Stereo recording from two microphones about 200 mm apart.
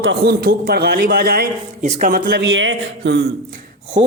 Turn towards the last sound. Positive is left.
turn(degrees=-50)  # may be behind; listen again after turning